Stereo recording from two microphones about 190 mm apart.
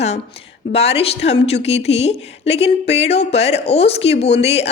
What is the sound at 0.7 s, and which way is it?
A woman's voice, 30° left (ahead or behind).